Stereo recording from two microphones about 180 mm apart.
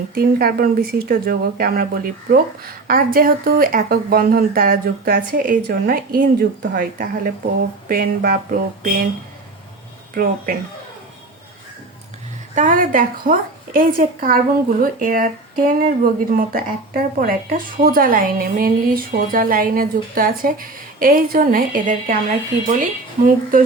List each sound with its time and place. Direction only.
0.1 s a woman's voice: 55° right (ahead or behind)
10.2 s a woman's voice: 55° right (ahead or behind)
12.5 s a woman's voice: 45° right (ahead or behind)